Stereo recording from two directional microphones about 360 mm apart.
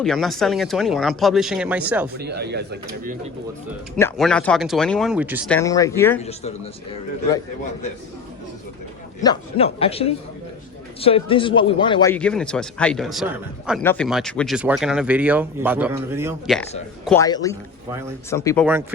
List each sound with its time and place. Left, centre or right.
0.0 s a man's voice: centre
2.1 s speech: right
3.9 s a man's voice: centre
9.2 s a man's voice: centre
17.1 s a man's voice: centre